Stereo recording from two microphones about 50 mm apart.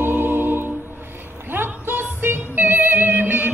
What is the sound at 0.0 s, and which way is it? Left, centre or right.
Music, right.